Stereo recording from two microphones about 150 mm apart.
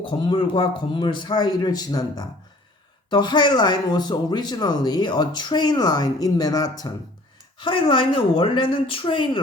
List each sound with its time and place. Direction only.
0.0 s speech: 30° left (ahead or behind)